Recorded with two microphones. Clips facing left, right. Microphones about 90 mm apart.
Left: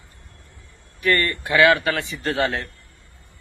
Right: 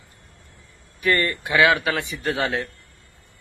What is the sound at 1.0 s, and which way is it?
A man's voice, 15° right (ahead or behind).